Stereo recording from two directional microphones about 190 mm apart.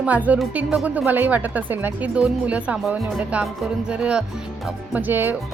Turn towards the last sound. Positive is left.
turn(degrees=-10)  # may be behind; listen again after turning